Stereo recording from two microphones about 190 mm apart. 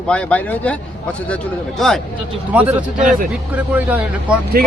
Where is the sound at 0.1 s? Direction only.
5° left (ahead or behind).